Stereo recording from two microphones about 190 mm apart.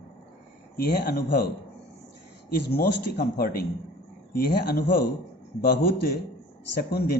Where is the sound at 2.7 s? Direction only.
55° left (ahead or behind).